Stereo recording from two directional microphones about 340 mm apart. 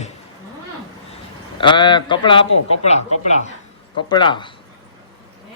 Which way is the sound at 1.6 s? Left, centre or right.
Centre.